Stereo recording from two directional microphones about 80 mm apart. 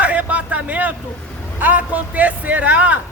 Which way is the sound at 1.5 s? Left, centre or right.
Right.